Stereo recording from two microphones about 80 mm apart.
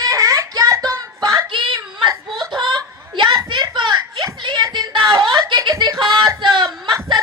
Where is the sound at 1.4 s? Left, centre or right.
Right.